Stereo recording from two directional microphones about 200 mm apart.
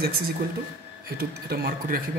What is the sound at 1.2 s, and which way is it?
Speech, 50° right (ahead or behind).